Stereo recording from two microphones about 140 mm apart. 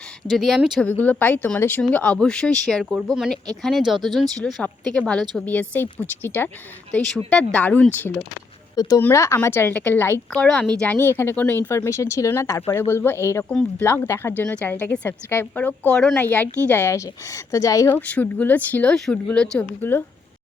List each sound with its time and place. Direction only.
0.3 s speech: centre (ahead or behind)
0.9 s speech: 10° left (ahead or behind)
8.7 s speech: 25° left (ahead or behind)